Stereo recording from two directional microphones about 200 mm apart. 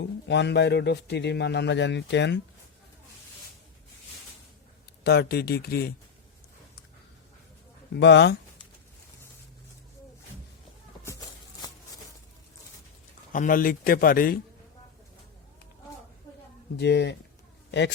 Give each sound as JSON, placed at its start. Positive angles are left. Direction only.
{"t": 0.0, "sound": "a man's voice", "side_deg": 60}
{"t": 5.0, "sound": "speech", "side_deg": 55}
{"t": 7.9, "sound": "a man's voice", "side_deg": 60}
{"t": 13.3, "sound": "speech", "side_deg": 40}
{"t": 16.7, "sound": "a man's voice", "side_deg": 55}